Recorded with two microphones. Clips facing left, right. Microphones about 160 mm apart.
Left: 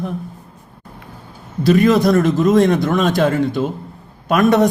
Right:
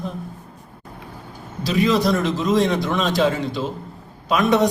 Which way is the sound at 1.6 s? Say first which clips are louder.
Left 6 dB; 55° left (ahead or behind).